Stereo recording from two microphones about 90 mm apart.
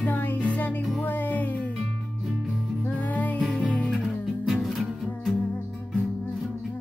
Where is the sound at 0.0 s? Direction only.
20° left (ahead or behind).